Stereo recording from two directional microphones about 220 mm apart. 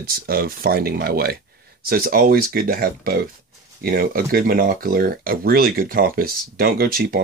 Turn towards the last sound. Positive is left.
turn(degrees=-40)  # may be behind; listen again after turning